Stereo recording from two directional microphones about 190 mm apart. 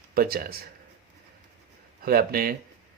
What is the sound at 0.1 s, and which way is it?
Speech, 50° right (ahead or behind).